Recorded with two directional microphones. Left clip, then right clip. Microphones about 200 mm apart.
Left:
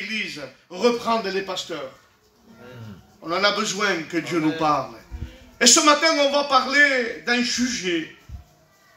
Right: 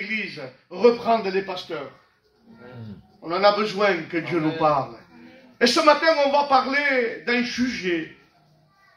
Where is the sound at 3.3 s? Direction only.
20° left (ahead or behind).